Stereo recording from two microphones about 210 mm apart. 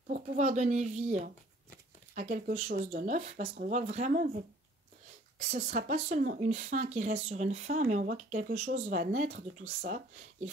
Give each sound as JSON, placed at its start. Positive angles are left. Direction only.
{"t": 0.1, "sound": "speech", "side_deg": -35}
{"t": 5.5, "sound": "speech", "side_deg": -30}